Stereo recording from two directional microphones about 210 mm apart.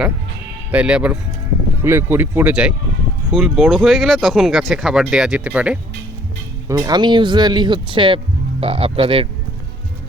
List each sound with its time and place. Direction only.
0.7 s speech: 5° right (ahead or behind)
6.7 s speech: 15° right (ahead or behind)